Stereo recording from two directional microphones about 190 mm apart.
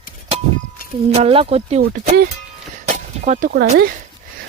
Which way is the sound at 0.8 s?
50° left (ahead or behind).